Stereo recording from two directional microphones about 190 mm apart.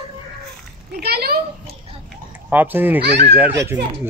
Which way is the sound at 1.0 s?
55° right (ahead or behind).